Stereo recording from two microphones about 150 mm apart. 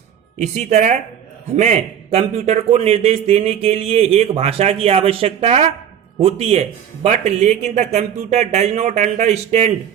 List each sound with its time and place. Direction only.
0.3 s a man's voice: 50° right (ahead or behind)